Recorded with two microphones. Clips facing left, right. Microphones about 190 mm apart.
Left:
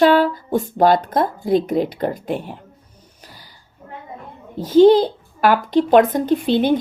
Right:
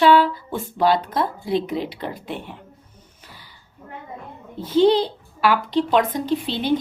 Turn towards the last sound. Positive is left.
turn(degrees=50)  # may be behind; listen again after turning